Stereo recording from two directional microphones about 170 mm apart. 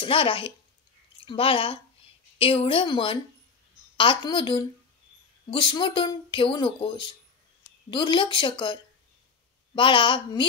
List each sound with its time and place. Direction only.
0.0 s speech: 30° left (ahead or behind)
9.8 s speech: 30° left (ahead or behind)